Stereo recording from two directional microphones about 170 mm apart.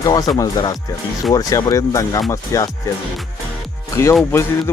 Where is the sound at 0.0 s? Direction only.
20° left (ahead or behind).